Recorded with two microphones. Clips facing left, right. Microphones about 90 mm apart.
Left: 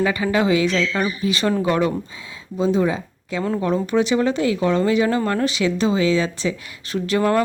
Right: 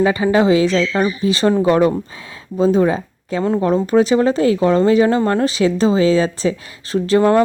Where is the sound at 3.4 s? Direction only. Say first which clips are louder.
Right 5 dB; 35° right (ahead or behind).